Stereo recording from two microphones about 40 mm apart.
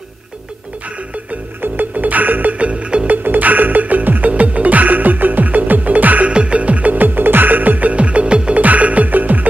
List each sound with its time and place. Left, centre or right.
1.6 s music: right
2.5 s music: right
3.1 s music: right
6.2 s music: right
7.9 s music: right